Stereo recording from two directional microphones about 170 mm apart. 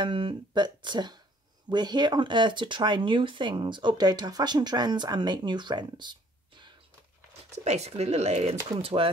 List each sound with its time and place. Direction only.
0.0 s speech: 30° right (ahead or behind)
7.5 s speech: 40° right (ahead or behind)